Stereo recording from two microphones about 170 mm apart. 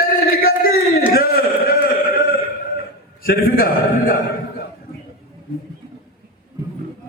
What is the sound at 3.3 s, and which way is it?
Speech, 60° left (ahead or behind).